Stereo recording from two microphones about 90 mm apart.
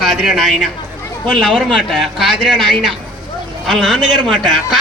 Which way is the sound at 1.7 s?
Centre (ahead or behind).